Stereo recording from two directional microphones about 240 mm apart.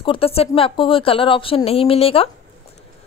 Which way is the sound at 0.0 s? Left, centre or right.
Left.